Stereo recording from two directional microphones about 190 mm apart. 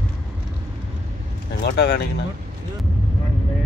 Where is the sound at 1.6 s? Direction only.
60° left (ahead or behind).